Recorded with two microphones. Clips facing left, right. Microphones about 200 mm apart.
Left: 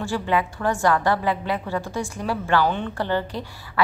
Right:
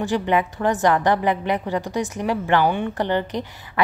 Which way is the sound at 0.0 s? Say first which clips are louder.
Right 3 dB; 20° right (ahead or behind).